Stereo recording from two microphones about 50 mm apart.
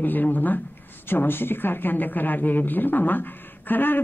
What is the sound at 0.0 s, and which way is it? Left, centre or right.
Speech, left.